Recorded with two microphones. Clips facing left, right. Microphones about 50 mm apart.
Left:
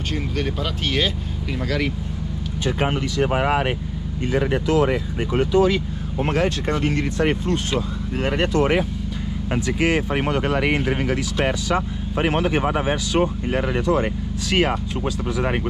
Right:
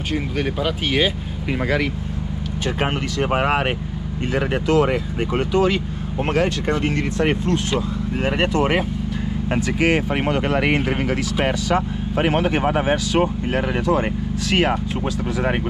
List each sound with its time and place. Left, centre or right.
0.1 s speech: centre
2.8 s speech: right
7.2 s speech: right
8.2 s speech: right
9.5 s speech: right
11.4 s speech: right